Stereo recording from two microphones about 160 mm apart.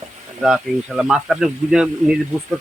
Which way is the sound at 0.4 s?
5° right (ahead or behind).